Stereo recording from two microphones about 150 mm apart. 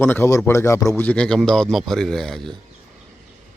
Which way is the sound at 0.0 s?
15° left (ahead or behind).